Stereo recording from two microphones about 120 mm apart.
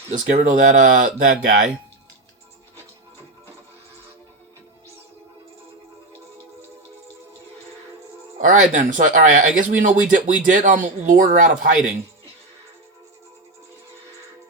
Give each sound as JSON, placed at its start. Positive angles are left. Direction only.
{"t": 0.1, "sound": "speech", "side_deg": -90}
{"t": 8.4, "sound": "speech", "side_deg": -90}